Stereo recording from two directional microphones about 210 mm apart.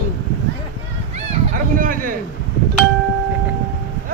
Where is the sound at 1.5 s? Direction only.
40° right (ahead or behind).